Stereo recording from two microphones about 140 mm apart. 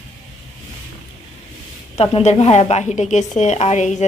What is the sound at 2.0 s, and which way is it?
A woman's voice, 50° left (ahead or behind).